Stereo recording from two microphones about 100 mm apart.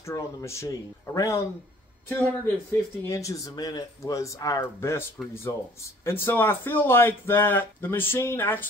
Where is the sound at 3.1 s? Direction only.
35° left (ahead or behind).